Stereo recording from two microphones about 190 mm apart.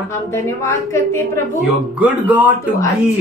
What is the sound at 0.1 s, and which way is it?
A woman's voice, 15° left (ahead or behind).